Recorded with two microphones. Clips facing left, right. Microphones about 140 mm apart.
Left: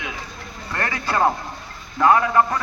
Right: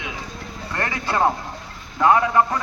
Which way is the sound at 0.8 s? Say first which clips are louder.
Even; 20° right (ahead or behind).